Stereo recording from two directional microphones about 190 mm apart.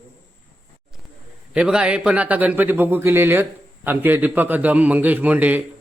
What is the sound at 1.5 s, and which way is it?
Speech, 5° right (ahead or behind).